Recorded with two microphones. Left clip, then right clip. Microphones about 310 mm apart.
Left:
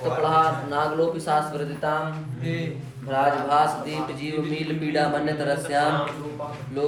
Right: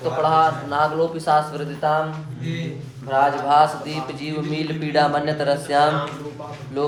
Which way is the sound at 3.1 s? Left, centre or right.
Centre.